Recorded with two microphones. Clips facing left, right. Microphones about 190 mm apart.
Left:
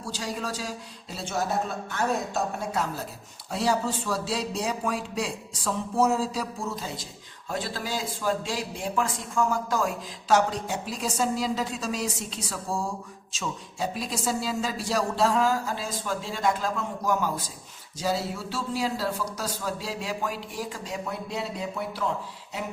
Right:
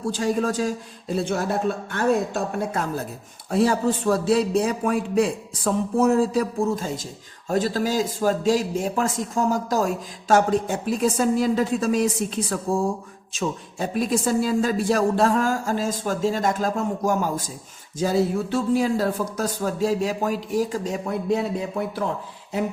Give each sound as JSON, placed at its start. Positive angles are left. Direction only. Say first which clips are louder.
{"t": 0.0, "sound": "a man's voice", "louder": "right 10 dB", "side_deg": -50}